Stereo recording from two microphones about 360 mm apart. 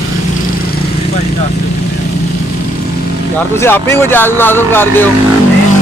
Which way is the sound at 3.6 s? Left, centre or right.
Centre.